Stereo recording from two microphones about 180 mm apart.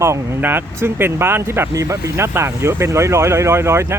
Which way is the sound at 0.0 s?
15° right (ahead or behind).